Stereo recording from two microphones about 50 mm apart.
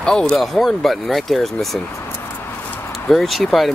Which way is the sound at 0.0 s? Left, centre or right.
Centre.